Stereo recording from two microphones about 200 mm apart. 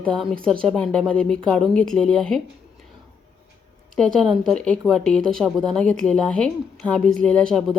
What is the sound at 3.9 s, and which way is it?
Speech, centre (ahead or behind).